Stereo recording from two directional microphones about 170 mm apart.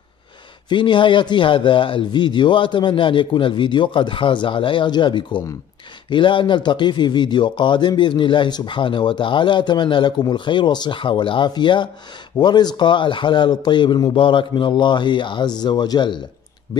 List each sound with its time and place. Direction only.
0.7 s speech: 30° left (ahead or behind)